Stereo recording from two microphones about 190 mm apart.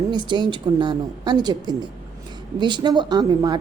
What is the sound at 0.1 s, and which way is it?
Speech, 25° right (ahead or behind).